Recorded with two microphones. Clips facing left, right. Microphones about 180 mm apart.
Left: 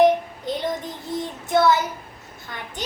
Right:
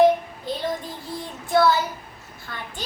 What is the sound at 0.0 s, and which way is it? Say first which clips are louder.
Child singing: even; 20° left (ahead or behind).